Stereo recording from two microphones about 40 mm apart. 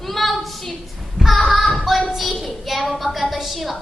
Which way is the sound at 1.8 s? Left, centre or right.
Centre.